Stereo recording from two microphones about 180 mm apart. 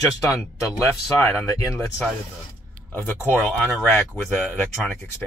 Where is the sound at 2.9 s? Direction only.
10° left (ahead or behind).